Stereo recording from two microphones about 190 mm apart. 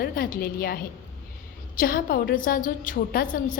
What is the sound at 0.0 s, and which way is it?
A woman's voice, 50° left (ahead or behind).